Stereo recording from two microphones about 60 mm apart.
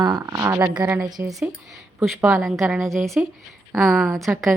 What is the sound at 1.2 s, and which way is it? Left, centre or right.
Speech, right.